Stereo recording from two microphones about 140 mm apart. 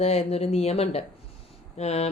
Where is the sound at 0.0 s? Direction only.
50° left (ahead or behind).